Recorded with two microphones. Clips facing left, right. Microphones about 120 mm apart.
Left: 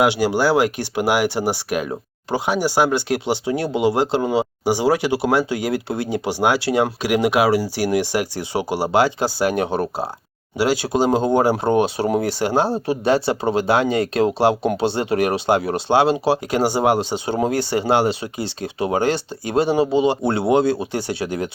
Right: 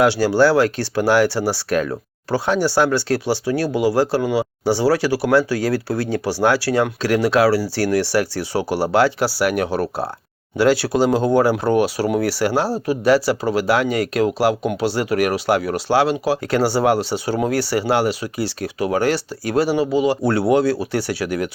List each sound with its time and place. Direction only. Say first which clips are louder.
0.0 s speech: right 2 dB; 15° left (ahead or behind)
4.6 s speech: right 2 dB; 15° left (ahead or behind)